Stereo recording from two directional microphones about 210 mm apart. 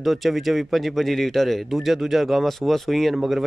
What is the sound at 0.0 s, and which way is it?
A man's voice, centre (ahead or behind).